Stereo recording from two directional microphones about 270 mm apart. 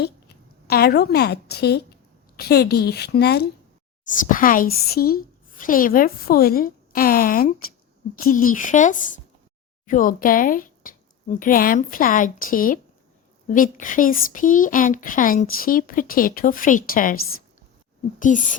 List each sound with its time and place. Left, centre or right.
0.7 s a woman's voice: left